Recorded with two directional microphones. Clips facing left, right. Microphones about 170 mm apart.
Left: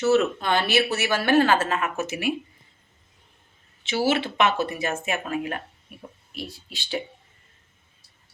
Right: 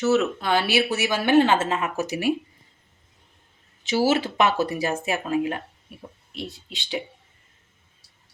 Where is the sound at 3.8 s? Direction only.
40° right (ahead or behind); by 7.0 s 20° right (ahead or behind).